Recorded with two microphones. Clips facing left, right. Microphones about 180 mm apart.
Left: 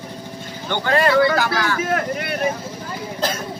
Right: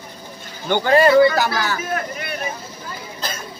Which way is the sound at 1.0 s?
25° right (ahead or behind).